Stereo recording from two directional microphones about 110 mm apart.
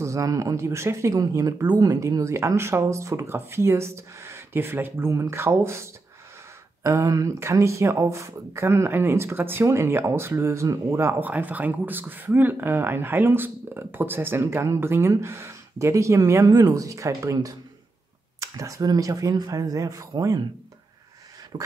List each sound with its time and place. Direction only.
0.0 s speech: 30° right (ahead or behind)
6.8 s speech: 25° right (ahead or behind)
21.5 s speech: 35° right (ahead or behind)